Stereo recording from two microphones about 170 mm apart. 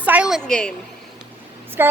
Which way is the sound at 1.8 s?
15° right (ahead or behind).